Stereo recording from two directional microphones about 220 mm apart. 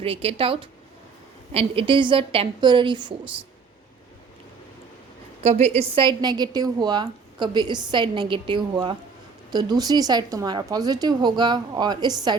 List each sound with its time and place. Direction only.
0.0 s a woman's voice: 25° right (ahead or behind)
5.4 s a woman's voice: 30° right (ahead or behind)